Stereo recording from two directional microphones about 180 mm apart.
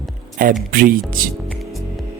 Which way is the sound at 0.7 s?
50° right (ahead or behind).